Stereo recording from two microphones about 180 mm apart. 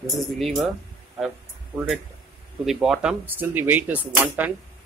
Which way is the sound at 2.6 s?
Centre (ahead or behind).